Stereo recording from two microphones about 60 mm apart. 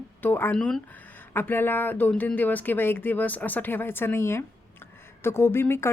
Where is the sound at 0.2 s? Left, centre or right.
Left.